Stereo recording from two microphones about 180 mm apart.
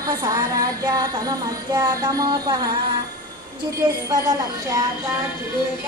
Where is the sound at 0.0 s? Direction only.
20° right (ahead or behind).